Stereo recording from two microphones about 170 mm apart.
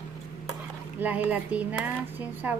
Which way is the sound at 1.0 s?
10° right (ahead or behind).